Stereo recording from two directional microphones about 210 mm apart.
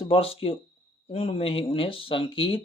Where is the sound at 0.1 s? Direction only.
25° left (ahead or behind).